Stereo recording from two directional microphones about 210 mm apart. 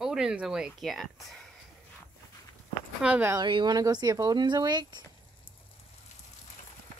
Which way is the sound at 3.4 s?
20° right (ahead or behind).